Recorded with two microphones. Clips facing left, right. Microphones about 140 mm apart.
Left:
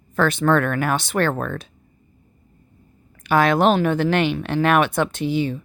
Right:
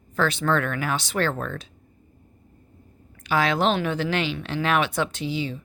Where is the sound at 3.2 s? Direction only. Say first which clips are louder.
Left 5 dB; 55° left (ahead or behind).